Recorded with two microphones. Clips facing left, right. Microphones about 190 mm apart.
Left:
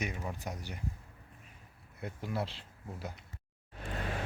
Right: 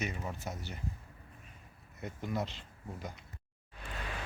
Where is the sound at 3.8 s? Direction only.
45° left (ahead or behind).